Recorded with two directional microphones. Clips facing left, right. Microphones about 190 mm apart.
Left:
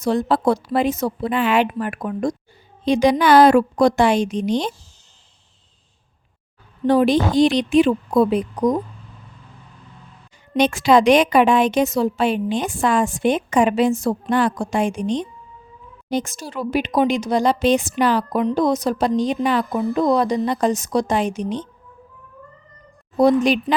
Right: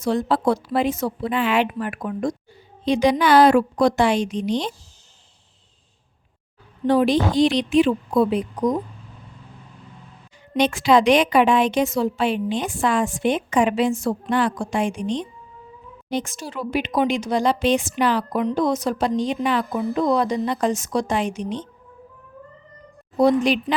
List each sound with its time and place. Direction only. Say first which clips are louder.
0.0 s a woman's voice: left 2 dB; 45° left (ahead or behind)
6.8 s a woman's voice: left 2 dB; 45° left (ahead or behind)
10.6 s a woman's voice: left 2 dB; 45° left (ahead or behind)
23.1 s a woman's voice: left 2 dB; 45° left (ahead or behind)